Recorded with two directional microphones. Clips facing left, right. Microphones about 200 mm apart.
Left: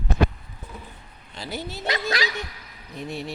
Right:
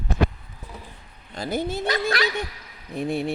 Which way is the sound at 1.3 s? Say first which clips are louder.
Right 7 dB; 50° right (ahead or behind).